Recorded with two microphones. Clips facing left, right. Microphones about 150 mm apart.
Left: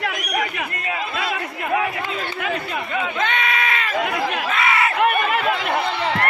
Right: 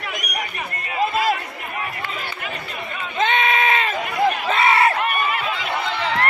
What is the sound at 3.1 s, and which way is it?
Sheep, 25° right (ahead or behind).